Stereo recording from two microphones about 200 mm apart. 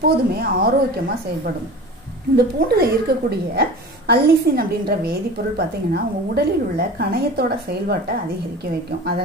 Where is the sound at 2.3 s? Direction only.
50° right (ahead or behind).